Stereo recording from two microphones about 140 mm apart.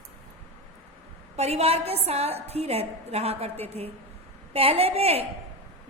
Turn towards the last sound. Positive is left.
turn(degrees=-45)  # may be behind; listen again after turning